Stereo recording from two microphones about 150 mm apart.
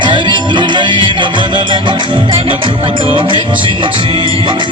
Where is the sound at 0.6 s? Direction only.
30° right (ahead or behind).